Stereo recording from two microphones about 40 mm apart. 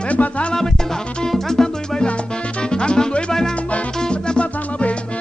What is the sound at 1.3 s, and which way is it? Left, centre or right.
Music, centre.